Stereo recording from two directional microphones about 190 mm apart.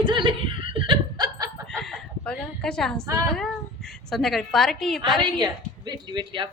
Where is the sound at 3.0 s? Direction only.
15° right (ahead or behind).